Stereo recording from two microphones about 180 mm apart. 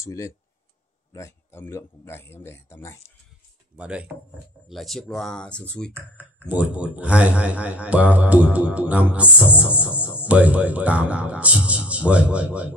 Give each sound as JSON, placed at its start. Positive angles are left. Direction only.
{"t": 0.0, "sound": "speech", "side_deg": 15}
{"t": 3.7, "sound": "speech", "side_deg": -5}
{"t": 6.5, "sound": "speech", "side_deg": -5}